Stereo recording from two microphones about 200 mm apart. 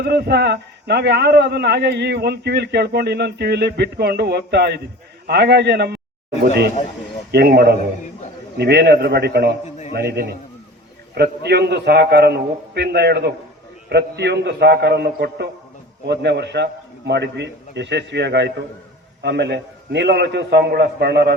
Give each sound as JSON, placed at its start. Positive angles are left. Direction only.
{"t": 0.0, "sound": "a man's voice", "side_deg": -55}
{"t": 7.3, "sound": "a man's voice", "side_deg": -55}
{"t": 9.6, "sound": "a sound", "side_deg": 35}
{"t": 9.9, "sound": "a man's voice", "side_deg": -55}